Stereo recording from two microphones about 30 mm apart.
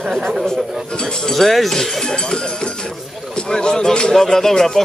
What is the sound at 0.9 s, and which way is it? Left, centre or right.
Speech, left.